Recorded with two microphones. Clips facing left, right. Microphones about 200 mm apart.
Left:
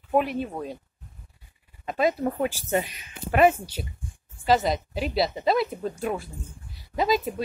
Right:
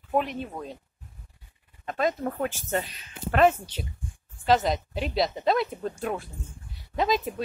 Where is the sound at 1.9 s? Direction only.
10° left (ahead or behind).